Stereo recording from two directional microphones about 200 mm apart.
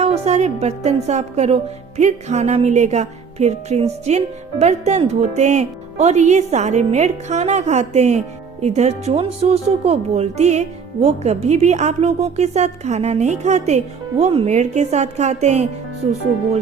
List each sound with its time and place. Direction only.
0.0 s a woman's voice: 35° right (ahead or behind)